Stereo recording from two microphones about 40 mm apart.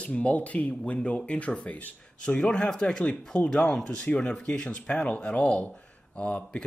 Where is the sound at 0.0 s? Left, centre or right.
Left.